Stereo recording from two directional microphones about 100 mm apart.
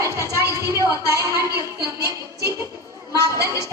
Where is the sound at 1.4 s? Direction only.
35° left (ahead or behind).